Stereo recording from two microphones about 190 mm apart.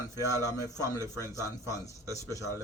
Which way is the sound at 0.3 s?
20° left (ahead or behind).